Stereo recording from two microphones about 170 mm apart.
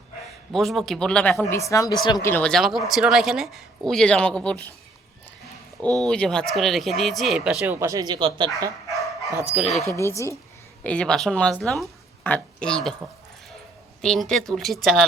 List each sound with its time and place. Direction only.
0.5 s speech: centre (ahead or behind)
1.5 s speech: 20° left (ahead or behind)
2.3 s speech: 5° left (ahead or behind)
6.0 s speech: 5° left (ahead or behind); by 8.4 s 25° right (ahead or behind)
9.5 s speech: centre (ahead or behind)
10.0 s a woman's voice: 15° left (ahead or behind)
10.8 s speech: 5° left (ahead or behind)
14.0 s speech: 5° left (ahead or behind)